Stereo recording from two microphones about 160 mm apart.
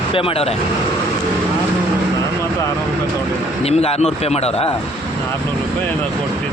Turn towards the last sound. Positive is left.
turn(degrees=40)  # may be behind; listen again after turning